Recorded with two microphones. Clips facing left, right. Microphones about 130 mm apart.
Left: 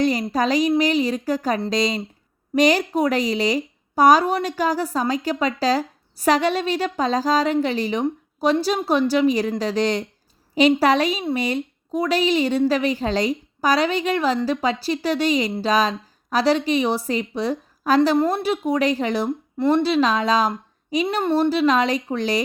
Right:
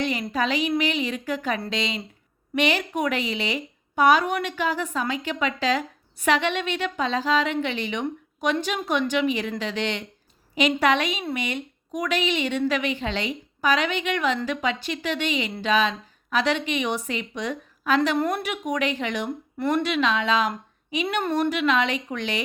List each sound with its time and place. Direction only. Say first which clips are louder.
0.0 s a woman's voice: left 5 dB; 40° left (ahead or behind)
18.2 s a woman's voice: left 5 dB; 25° left (ahead or behind)